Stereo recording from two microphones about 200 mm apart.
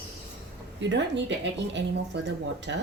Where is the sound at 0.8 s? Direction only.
60° right (ahead or behind).